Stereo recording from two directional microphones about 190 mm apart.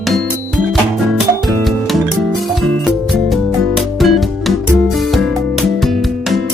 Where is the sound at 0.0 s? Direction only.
Centre (ahead or behind).